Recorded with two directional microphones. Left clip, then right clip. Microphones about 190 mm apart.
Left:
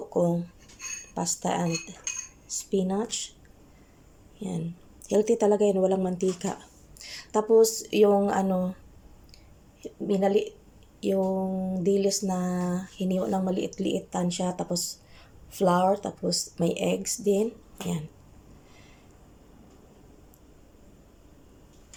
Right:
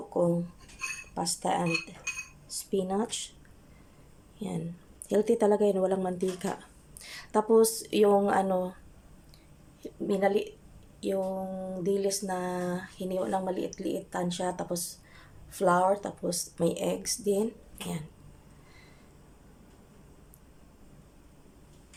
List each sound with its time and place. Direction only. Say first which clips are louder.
0.1 s speech: left 1 dB; centre (ahead or behind)
4.4 s speech: left 2 dB; centre (ahead or behind)
9.8 s a woman's voice: left 2 dB; 5° left (ahead or behind)
11.0 s a sound: left 4 dB; 5° left (ahead or behind)
15.5 s speech: left 2 dB; 5° left (ahead or behind)